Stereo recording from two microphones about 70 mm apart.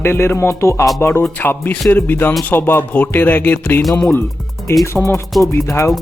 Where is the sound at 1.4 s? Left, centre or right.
Left.